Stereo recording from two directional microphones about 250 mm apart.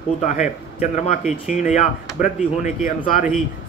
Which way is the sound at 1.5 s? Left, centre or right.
Left.